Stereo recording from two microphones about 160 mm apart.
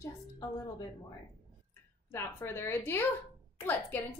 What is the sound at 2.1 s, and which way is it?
A woman's voice, 15° left (ahead or behind).